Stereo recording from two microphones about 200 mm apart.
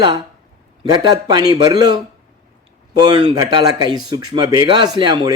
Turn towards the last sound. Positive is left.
turn(degrees=-20)  # may be behind; listen again after turning